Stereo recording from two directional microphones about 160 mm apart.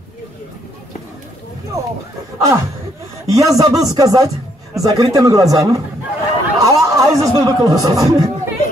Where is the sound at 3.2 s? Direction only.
20° right (ahead or behind).